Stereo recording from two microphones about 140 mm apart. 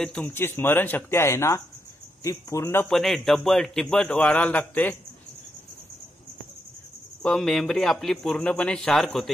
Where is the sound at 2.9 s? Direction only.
Centre (ahead or behind).